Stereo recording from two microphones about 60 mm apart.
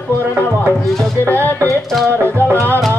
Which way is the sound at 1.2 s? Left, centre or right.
Left.